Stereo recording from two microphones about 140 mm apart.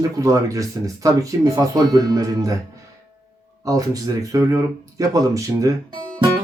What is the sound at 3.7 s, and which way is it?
Speech, 25° right (ahead or behind).